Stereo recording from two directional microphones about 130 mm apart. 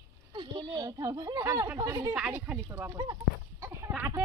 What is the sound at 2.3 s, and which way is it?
Speech, 10° right (ahead or behind).